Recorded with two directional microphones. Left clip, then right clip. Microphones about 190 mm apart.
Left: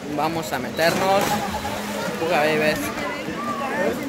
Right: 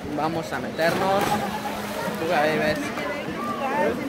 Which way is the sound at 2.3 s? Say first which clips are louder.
Left 2 dB; 20° left (ahead or behind).